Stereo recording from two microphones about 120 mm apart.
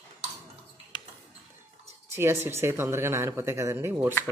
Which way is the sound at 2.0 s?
25° right (ahead or behind).